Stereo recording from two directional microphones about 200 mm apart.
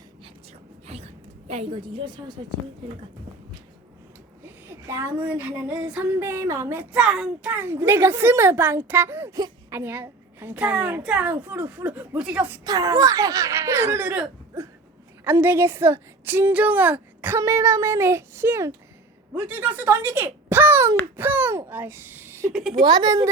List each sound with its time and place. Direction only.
0.9 s a sound: 30° right (ahead or behind)
4.9 s speech: 10° right (ahead or behind)
12.6 s a child's voice: 20° right (ahead or behind)
22.5 s a woman's voice: centre (ahead or behind)
22.8 s speech: 20° right (ahead or behind)